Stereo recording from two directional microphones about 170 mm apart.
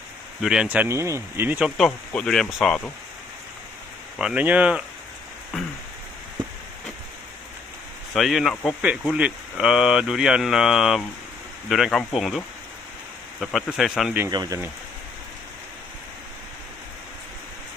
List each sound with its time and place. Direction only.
0.4 s speech: 5° right (ahead or behind)
4.2 s speech: 5° right (ahead or behind)
8.1 s speech: centre (ahead or behind)
13.4 s speech: centre (ahead or behind)
14.3 s speech: 20° right (ahead or behind)